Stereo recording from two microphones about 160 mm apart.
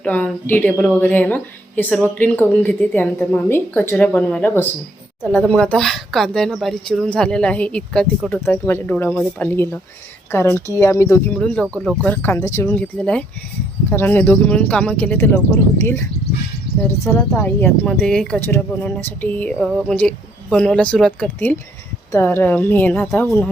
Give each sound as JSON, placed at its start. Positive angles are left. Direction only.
{"t": 0.0, "sound": "speech", "side_deg": 10}
{"t": 11.3, "sound": "speech", "side_deg": 5}
{"t": 16.8, "sound": "speech", "side_deg": 10}